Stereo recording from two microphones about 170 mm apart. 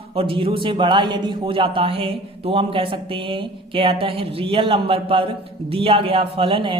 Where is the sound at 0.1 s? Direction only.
30° right (ahead or behind).